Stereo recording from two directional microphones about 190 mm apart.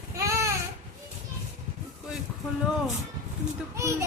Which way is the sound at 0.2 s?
15° right (ahead or behind).